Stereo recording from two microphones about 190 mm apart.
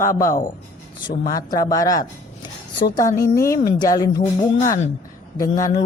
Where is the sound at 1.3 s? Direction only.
20° left (ahead or behind).